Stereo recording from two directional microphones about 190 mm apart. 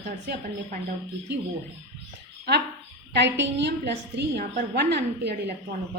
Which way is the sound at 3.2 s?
70° right (ahead or behind).